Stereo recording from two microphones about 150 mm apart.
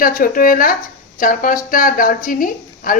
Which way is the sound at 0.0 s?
65° left (ahead or behind).